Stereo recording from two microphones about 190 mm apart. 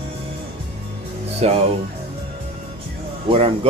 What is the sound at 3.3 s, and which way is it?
Speech, 30° right (ahead or behind).